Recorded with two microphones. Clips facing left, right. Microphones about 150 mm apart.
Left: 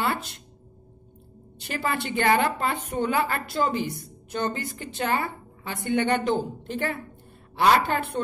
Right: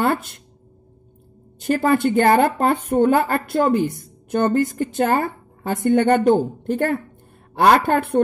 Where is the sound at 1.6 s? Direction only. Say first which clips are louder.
Right 11 dB; 45° right (ahead or behind).